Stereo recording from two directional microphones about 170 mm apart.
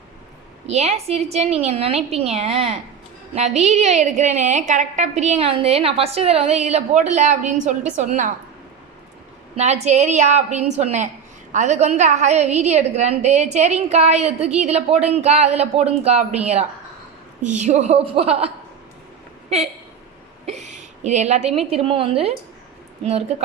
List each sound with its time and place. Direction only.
0.7 s a woman's voice: 40° right (ahead or behind)
9.6 s a woman's voice: 40° right (ahead or behind)
17.4 s a woman's voice: 45° right (ahead or behind)